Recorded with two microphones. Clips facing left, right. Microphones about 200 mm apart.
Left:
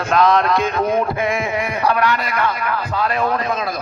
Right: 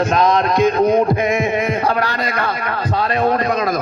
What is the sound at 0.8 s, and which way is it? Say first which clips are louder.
Speech: right 4 dB; 20° right (ahead or behind).